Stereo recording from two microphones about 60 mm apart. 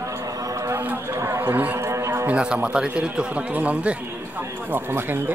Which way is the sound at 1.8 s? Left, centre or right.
Right.